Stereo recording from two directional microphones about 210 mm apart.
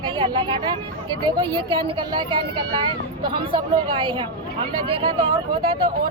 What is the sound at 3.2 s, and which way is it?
Speech, 25° right (ahead or behind).